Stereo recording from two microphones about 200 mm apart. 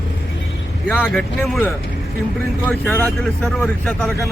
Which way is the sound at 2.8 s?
10° left (ahead or behind).